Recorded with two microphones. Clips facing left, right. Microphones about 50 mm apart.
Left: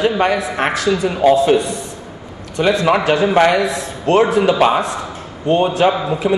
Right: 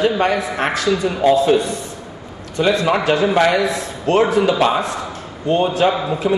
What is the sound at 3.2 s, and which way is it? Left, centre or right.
Speech, centre.